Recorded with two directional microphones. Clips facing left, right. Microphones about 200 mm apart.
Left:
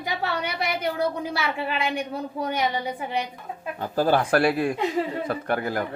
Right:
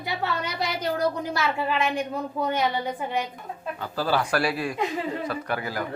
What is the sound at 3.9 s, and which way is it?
Speech, 50° left (ahead or behind).